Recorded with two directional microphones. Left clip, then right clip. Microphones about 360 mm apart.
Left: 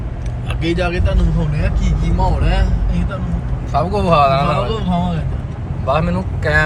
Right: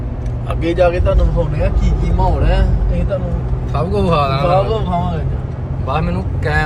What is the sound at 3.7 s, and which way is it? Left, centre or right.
Speech, centre.